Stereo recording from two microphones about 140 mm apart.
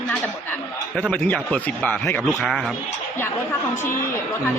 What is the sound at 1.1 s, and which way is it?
Speech, 10° left (ahead or behind).